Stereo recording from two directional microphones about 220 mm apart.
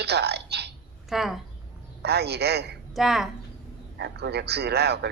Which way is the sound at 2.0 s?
50° right (ahead or behind).